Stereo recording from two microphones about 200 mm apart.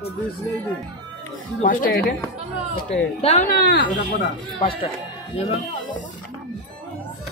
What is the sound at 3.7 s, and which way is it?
Speech, 55° left (ahead or behind).